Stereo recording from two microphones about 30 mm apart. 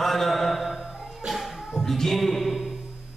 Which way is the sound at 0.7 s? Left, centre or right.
Right.